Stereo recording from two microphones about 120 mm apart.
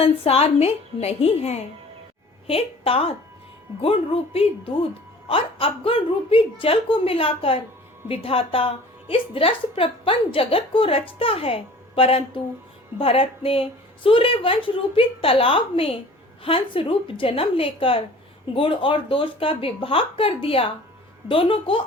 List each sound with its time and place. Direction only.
0.0 s a woman's voice: 60° left (ahead or behind)